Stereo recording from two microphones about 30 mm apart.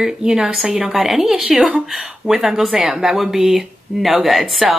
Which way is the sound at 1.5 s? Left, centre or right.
Right.